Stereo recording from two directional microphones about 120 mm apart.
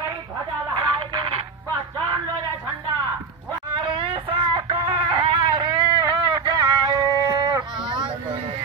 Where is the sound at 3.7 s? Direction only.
45° right (ahead or behind).